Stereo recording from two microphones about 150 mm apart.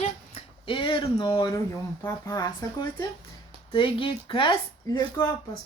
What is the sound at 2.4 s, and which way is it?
Speech, 30° left (ahead or behind).